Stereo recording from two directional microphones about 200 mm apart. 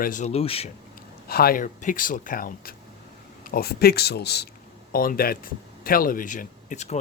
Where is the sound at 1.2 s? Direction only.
50° left (ahead or behind).